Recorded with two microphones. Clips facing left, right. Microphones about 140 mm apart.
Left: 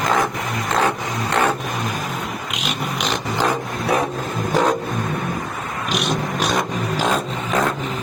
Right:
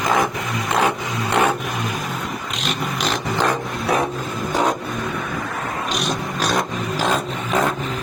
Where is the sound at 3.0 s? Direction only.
Centre (ahead or behind).